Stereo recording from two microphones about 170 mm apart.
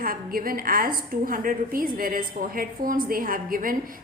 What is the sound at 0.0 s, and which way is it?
A woman's voice, 55° right (ahead or behind).